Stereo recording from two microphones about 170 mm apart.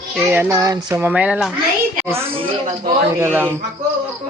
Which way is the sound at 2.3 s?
35° right (ahead or behind).